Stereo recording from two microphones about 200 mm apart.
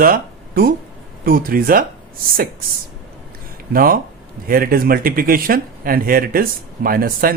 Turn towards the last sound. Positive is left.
turn(degrees=-45)  # may be behind; listen again after turning